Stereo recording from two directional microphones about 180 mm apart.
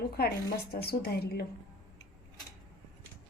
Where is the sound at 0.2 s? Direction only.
60° left (ahead or behind).